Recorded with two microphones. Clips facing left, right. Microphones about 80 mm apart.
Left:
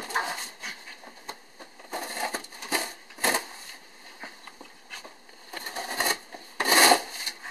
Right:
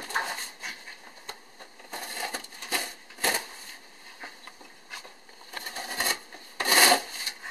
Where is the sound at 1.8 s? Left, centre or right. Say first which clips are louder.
Left 4 dB; left.